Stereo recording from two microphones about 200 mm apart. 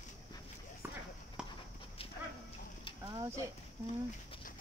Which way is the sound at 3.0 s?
15° right (ahead or behind).